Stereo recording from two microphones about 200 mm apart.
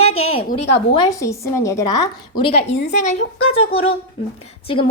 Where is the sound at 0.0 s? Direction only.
90° left.